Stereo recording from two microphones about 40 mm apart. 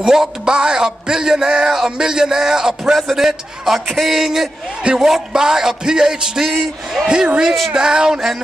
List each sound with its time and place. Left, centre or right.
0.0 s a man's voice: centre